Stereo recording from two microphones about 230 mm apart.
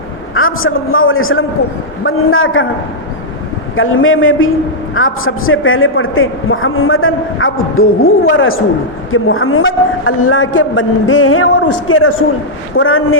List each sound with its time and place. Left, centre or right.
0.3 s a man's voice: left
3.8 s a man's voice: left